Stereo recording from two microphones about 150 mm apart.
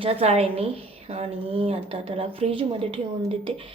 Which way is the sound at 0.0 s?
40° right (ahead or behind).